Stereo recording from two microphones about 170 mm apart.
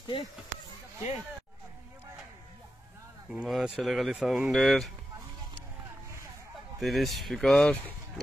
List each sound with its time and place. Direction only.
0.0 s a sound: 25° left (ahead or behind)
3.3 s speech: 5° right (ahead or behind)
6.8 s speech: centre (ahead or behind)